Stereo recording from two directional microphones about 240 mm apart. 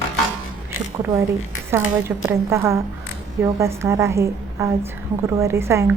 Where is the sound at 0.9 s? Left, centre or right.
Centre.